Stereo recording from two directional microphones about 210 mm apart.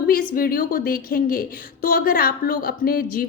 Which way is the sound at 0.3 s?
45° left (ahead or behind).